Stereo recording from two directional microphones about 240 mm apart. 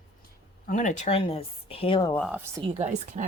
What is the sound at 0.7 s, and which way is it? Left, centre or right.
Speech, left.